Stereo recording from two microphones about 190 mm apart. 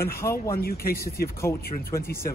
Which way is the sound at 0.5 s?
50° left (ahead or behind).